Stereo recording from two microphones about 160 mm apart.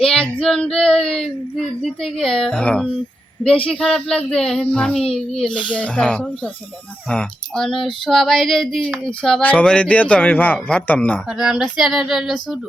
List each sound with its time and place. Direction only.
0.0 s speech: 5° left (ahead or behind)
5.7 s a sound: 5° left (ahead or behind)
11.3 s speech: 5° right (ahead or behind)